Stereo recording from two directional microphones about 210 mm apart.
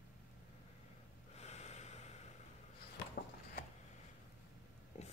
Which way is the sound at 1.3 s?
30° left (ahead or behind).